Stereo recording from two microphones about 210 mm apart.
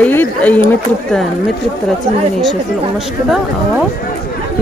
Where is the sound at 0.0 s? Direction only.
5° left (ahead or behind).